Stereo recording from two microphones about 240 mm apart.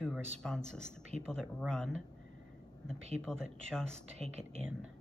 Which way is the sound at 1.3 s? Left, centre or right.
Centre.